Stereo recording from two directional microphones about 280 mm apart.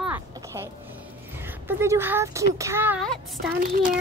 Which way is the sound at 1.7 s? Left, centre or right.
Centre.